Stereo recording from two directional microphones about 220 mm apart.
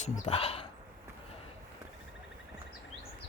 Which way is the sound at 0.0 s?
30° left (ahead or behind).